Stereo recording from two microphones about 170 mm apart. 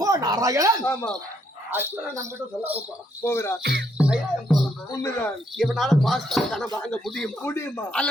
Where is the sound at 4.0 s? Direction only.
5° right (ahead or behind).